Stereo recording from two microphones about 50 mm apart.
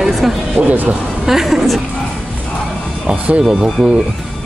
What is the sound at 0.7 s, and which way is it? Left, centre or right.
Speech, right.